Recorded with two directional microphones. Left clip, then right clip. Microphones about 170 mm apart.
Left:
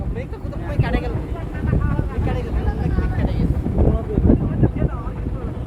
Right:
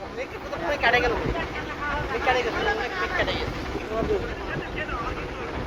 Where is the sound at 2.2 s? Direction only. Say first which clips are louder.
Right 8 dB; 40° right (ahead or behind).